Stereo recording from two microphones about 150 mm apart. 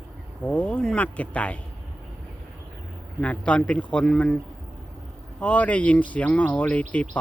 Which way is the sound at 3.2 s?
10° left (ahead or behind).